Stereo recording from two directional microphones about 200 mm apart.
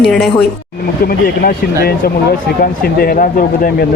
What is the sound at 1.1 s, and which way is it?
Speech, 50° left (ahead or behind).